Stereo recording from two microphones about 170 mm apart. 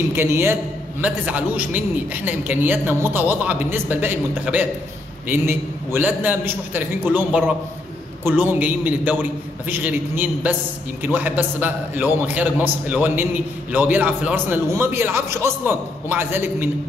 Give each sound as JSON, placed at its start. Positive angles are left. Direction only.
{"t": 0.1, "sound": "a man's voice", "side_deg": -15}